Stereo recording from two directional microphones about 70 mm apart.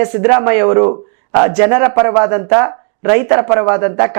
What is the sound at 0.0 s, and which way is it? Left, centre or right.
Speech, centre.